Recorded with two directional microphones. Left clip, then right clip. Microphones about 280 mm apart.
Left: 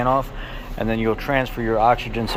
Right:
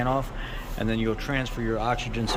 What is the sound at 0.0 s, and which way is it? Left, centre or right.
Speech, centre.